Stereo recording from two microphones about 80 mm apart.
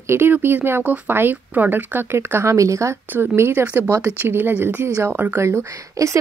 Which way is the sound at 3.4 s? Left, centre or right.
Right.